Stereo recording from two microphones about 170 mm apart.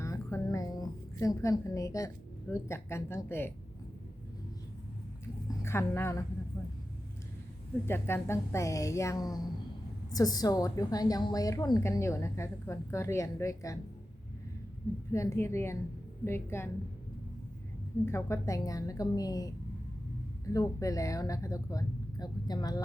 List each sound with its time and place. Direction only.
0.0 s a sound: 15° left (ahead or behind)
2.5 s a woman's voice: 15° left (ahead or behind)
5.5 s a woman's voice: 15° left (ahead or behind)
7.9 s a woman's voice: 15° left (ahead or behind)
15.1 s a woman's voice: 15° left (ahead or behind)
18.0 s a woman's voice: 15° left (ahead or behind)